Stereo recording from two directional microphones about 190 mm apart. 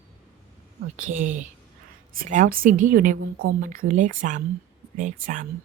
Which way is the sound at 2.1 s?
45° right (ahead or behind).